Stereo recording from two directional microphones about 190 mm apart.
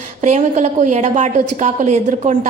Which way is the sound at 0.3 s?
40° right (ahead or behind).